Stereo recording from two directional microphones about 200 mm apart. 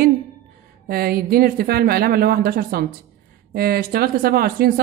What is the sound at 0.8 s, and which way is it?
Speech, 50° right (ahead or behind).